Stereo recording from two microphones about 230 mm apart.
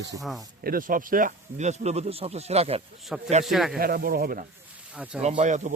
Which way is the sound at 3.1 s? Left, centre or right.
Centre.